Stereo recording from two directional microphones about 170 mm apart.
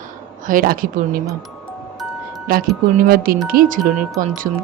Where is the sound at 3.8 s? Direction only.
Centre (ahead or behind).